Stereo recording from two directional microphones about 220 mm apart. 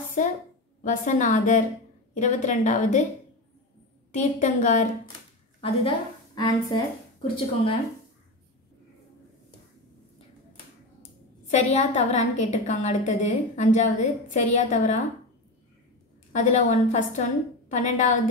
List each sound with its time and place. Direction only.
0.2 s a woman's voice: 35° left (ahead or behind)
4.1 s a woman's voice: 35° left (ahead or behind)
5.6 s a woman's voice: 20° left (ahead or behind)
11.6 s a woman's voice: 30° left (ahead or behind)
16.3 s a woman's voice: 35° left (ahead or behind)